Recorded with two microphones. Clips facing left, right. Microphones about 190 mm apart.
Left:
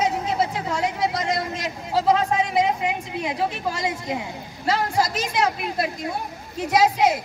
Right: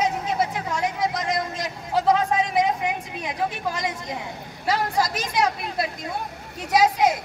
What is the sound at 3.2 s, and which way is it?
Speech, 25° left (ahead or behind).